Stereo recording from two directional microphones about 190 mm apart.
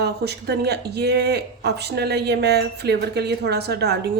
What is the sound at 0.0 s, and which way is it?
Speech, 60° right (ahead or behind).